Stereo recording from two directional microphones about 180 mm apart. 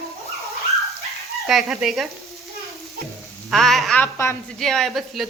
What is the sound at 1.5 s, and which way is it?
Speech, centre (ahead or behind).